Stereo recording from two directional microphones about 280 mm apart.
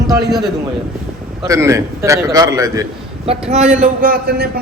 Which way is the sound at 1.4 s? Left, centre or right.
Centre.